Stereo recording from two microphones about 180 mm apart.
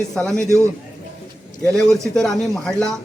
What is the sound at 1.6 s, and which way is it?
Speech, centre (ahead or behind).